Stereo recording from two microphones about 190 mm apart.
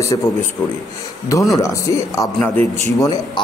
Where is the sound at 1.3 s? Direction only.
15° left (ahead or behind).